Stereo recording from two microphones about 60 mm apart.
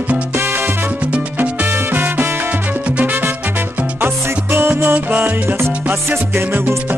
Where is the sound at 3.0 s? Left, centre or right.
Right.